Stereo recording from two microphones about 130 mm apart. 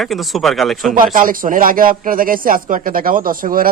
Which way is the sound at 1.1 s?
90° right.